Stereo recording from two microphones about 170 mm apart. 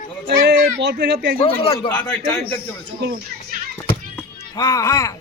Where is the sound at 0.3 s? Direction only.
85° right.